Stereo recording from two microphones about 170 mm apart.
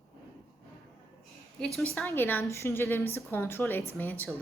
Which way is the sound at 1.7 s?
Centre (ahead or behind).